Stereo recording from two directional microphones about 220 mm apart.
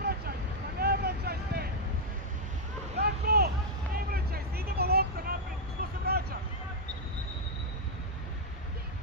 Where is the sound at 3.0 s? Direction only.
45° right (ahead or behind).